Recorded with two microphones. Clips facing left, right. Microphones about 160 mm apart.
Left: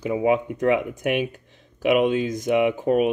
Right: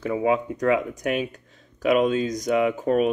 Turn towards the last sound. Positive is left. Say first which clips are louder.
# left 1 dB
turn(degrees=15)  # may be behind; listen again after turning